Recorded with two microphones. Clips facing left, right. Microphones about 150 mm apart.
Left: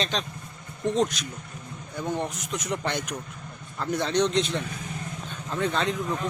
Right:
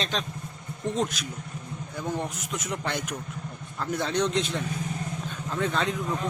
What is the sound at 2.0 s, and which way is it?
Speech, 5° right (ahead or behind).